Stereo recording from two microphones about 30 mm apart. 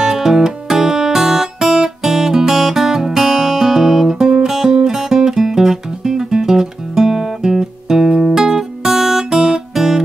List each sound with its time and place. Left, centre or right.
0.0 s music: centre
8.9 s guitar: centre